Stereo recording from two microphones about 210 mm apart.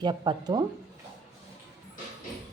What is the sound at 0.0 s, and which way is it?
Speech, 20° right (ahead or behind).